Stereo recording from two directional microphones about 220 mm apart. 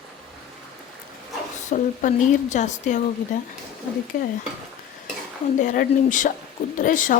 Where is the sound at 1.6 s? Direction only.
35° left (ahead or behind).